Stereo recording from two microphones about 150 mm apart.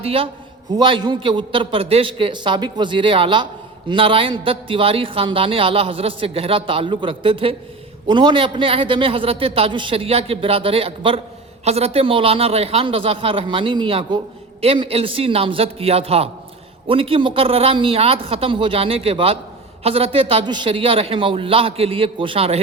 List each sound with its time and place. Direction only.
0.0 s a man's voice: 40° right (ahead or behind)